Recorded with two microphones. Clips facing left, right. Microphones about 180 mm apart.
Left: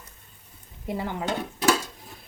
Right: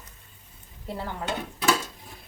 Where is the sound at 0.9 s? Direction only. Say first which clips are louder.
Left 4 dB; 15° left (ahead or behind).